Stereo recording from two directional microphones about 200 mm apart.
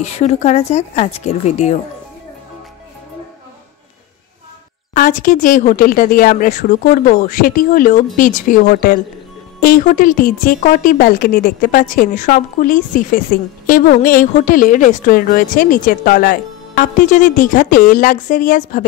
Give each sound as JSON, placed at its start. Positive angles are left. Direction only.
{"t": 0.0, "sound": "speech", "side_deg": 35}
{"t": 4.9, "sound": "a woman's voice", "side_deg": 45}